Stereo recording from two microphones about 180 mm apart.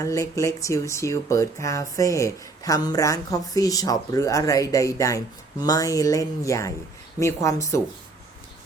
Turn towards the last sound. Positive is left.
turn(degrees=15)  # may be behind; listen again after turning